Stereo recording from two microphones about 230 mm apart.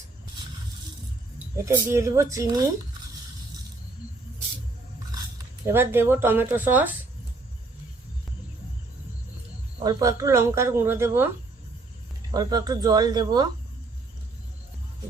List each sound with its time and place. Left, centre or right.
1.6 s speech: centre
5.6 s speech: centre
9.8 s speech: centre
12.3 s speech: centre